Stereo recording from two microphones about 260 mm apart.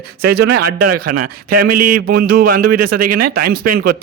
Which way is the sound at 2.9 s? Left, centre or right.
Right.